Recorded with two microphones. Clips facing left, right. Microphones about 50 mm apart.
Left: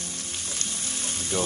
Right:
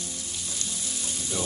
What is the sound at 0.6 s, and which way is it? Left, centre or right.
Frying, left.